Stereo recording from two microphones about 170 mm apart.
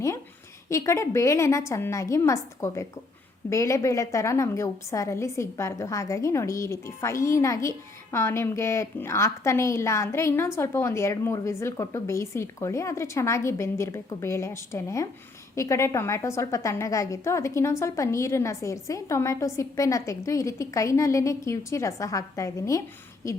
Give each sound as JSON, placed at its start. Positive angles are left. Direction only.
{"t": 0.7, "sound": "a woman's voice", "side_deg": 15}